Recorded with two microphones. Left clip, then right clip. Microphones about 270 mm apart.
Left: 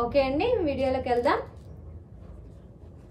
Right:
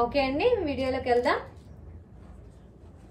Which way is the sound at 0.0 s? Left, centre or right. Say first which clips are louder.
Even; centre.